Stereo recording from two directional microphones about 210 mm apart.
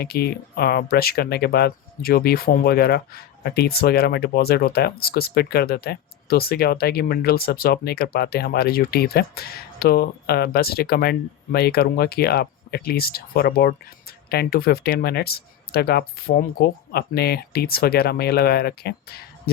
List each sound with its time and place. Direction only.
0.0 s speech: 50° left (ahead or behind)